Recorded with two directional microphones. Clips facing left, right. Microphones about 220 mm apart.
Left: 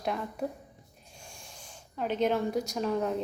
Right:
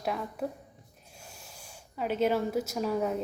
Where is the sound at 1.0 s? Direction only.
5° right (ahead or behind).